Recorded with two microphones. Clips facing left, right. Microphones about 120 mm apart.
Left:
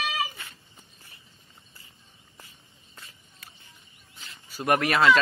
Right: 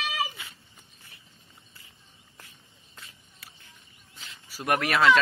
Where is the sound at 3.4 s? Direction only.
Centre (ahead or behind).